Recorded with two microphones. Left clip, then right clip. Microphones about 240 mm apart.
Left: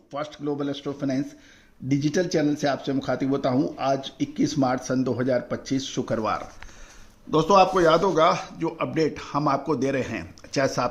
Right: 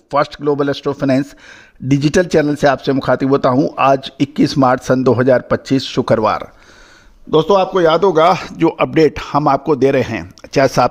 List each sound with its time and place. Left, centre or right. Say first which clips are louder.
0.1 s speech: right 15 dB; right